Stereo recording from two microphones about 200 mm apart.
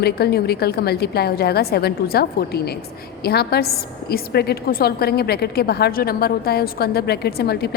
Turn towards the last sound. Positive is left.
turn(degrees=55)  # may be behind; listen again after turning